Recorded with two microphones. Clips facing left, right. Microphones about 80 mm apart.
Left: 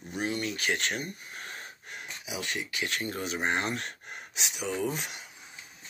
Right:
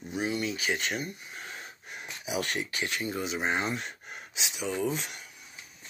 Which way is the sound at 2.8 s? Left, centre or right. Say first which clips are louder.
Left 1 dB; centre.